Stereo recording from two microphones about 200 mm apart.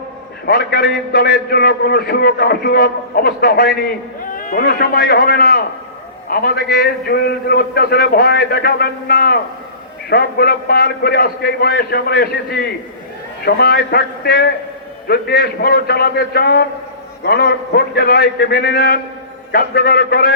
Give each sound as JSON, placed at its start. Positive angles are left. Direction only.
{"t": 0.4, "sound": "a man's voice", "side_deg": 50}